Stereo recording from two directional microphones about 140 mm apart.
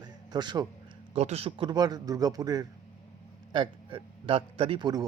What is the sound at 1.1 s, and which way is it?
Speech, 50° right (ahead or behind).